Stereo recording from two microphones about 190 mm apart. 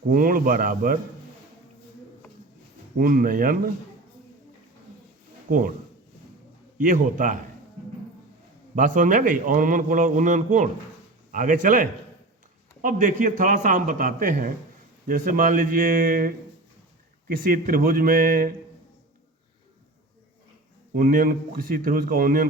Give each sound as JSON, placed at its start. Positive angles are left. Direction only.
{"t": 0.1, "sound": "a man's voice", "side_deg": -45}
{"t": 3.0, "sound": "a man's voice", "side_deg": -45}
{"t": 5.5, "sound": "speech", "side_deg": -45}
{"t": 6.7, "sound": "a man's voice", "side_deg": -45}
{"t": 8.7, "sound": "a man's voice", "side_deg": -45}
{"t": 20.9, "sound": "a man's voice", "side_deg": -45}